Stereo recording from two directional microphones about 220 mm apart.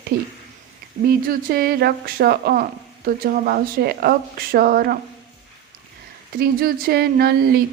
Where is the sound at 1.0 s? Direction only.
40° right (ahead or behind).